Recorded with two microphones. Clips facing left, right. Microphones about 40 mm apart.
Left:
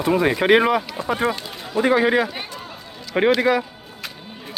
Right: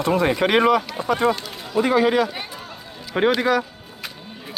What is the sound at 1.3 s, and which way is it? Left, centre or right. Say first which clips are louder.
A man's voice: right 1 dB; centre.